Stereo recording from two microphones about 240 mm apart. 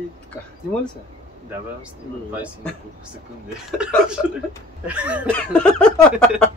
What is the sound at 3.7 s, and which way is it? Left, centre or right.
Speech, centre.